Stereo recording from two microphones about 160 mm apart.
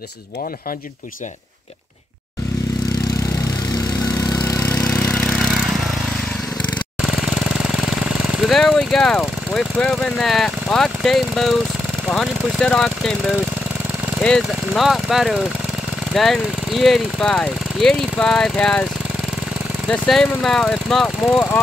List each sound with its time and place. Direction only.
4.0 s vehicle: 25° left (ahead or behind); by 5.7 s centre (ahead or behind)
7.0 s jackhammer: centre (ahead or behind)
12.1 s speech: 5° left (ahead or behind)
14.2 s speech: 5° left (ahead or behind)
19.9 s speech: 5° left (ahead or behind)